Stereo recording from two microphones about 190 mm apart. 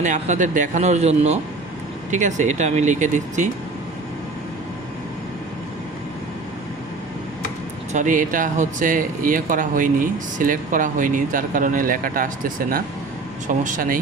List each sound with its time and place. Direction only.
0.0 s speech: 40° right (ahead or behind)
7.9 s speech: 45° right (ahead or behind)